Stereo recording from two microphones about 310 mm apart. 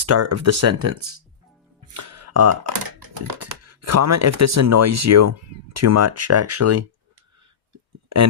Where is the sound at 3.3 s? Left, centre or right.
Right.